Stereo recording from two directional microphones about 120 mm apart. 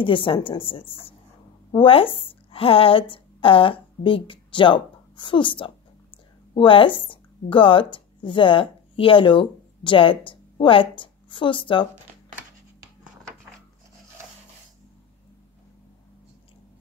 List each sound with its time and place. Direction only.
0.0 s a woman's voice: 45° left (ahead or behind)